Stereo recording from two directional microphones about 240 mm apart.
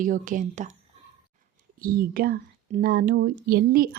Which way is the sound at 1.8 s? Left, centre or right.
Right.